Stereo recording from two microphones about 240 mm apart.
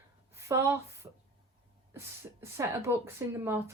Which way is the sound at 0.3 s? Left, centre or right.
Centre.